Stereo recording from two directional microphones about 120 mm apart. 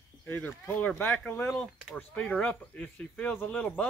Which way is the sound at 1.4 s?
Centre (ahead or behind).